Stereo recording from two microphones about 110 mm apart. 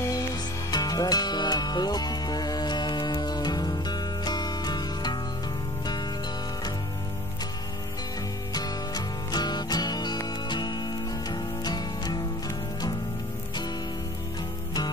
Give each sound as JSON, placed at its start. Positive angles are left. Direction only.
{"t": 0.0, "sound": "music", "side_deg": 35}
{"t": 8.5, "sound": "music", "side_deg": 35}